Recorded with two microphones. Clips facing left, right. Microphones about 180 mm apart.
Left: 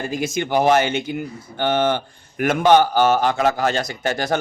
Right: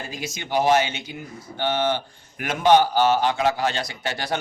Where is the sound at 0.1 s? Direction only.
50° left (ahead or behind).